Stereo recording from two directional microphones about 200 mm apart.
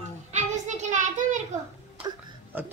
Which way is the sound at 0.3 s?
35° right (ahead or behind).